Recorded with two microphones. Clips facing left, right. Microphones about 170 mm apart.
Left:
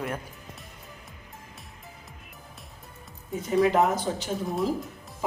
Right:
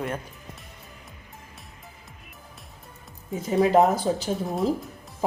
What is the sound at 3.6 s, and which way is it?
Speech, 30° right (ahead or behind).